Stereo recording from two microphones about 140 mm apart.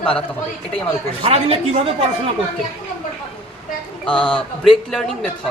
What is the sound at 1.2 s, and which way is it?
Speech, 45° right (ahead or behind).